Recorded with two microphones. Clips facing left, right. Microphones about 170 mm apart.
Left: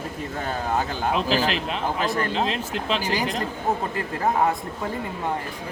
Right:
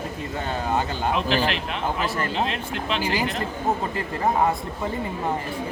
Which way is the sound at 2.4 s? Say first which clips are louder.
Left 2 dB; 35° left (ahead or behind).